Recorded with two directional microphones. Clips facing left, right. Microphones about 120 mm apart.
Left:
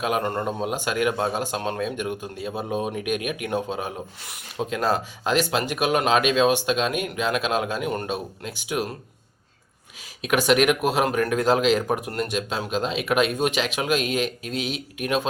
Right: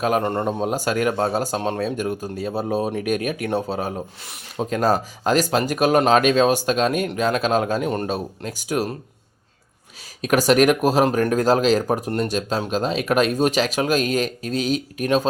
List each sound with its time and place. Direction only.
0.0 s speech: 35° right (ahead or behind)
4.7 s speech: 40° right (ahead or behind)
10.2 s speech: 40° right (ahead or behind)